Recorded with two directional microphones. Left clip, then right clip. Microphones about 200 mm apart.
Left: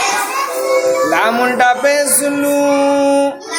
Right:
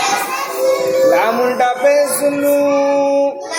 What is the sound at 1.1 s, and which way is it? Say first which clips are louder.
Speech: even; 30° left (ahead or behind).